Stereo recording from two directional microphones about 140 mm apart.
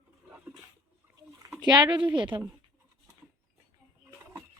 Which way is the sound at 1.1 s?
25° right (ahead or behind).